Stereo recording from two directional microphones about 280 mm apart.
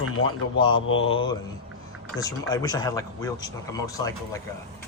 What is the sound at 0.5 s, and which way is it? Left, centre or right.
Speech, centre.